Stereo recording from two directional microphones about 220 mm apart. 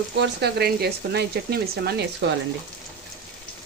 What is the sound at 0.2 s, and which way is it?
Speech, 50° right (ahead or behind).